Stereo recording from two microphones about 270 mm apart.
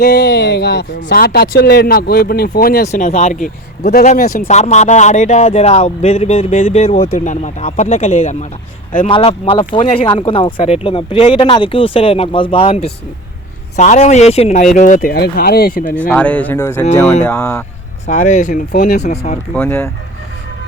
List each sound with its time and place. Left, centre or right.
0.0 s speech: left
16.0 s speech: centre
18.0 s speech: left
19.5 s speech: centre